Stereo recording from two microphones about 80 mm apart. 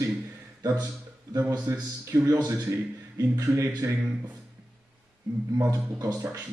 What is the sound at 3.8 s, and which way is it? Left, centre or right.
Speech, right.